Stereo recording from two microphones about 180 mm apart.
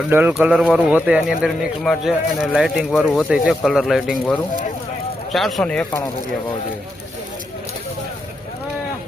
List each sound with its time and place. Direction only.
0.1 s speech: 10° right (ahead or behind); by 6.0 s 5° left (ahead or behind)